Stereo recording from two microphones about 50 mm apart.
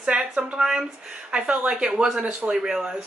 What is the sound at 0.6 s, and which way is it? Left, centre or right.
Speech, centre.